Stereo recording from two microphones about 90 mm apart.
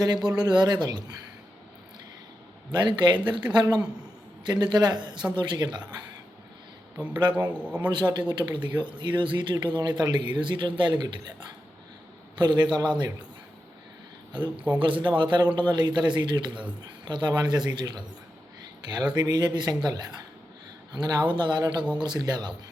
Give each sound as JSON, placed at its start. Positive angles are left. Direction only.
{"t": 0.3, "sound": "speech", "side_deg": -50}
{"t": 2.8, "sound": "a man's voice", "side_deg": -60}
{"t": 7.1, "sound": "a man's voice", "side_deg": -55}
{"t": 14.8, "sound": "a man's voice", "side_deg": -65}